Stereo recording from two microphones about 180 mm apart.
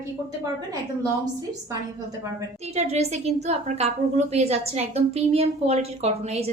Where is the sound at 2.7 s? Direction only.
35° right (ahead or behind).